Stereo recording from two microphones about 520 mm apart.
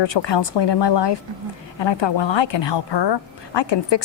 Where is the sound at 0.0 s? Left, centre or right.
Left.